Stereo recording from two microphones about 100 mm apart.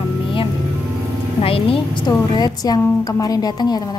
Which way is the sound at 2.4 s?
40° left (ahead or behind).